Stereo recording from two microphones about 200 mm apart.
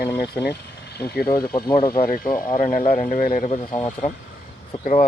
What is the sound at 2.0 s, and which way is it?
A man's voice, 45° left (ahead or behind).